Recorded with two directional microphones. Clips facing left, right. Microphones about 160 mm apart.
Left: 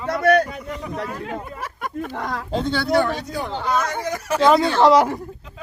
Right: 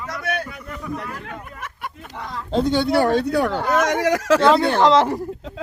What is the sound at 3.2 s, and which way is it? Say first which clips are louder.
Speech: right 7 dB; 70° right (ahead or behind).